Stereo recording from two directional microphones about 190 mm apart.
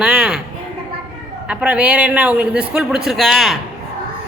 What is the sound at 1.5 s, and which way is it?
A man's voice, 5° right (ahead or behind).